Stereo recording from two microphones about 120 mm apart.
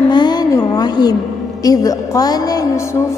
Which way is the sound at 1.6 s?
30° left (ahead or behind).